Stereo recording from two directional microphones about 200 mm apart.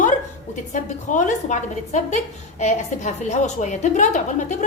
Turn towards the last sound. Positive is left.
turn(degrees=40)  # may be behind; listen again after turning